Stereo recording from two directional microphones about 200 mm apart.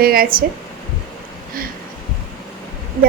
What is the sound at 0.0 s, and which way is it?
Speech, 50° right (ahead or behind).